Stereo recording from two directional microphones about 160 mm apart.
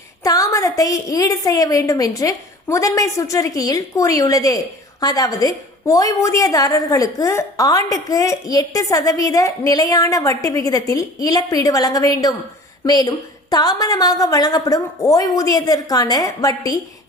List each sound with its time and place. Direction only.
0.2 s a woman's voice: 20° left (ahead or behind)